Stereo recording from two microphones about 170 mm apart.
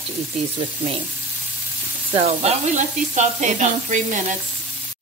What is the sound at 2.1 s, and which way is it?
Speech, 40° right (ahead or behind).